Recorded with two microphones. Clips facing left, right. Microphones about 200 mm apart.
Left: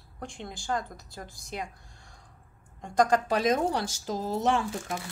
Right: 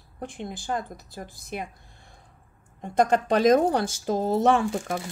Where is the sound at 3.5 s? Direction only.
55° right (ahead or behind).